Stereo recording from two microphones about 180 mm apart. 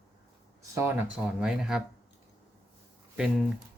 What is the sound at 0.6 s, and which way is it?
Speech, 15° right (ahead or behind).